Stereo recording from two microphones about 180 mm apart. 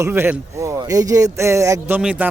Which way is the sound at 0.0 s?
10° right (ahead or behind).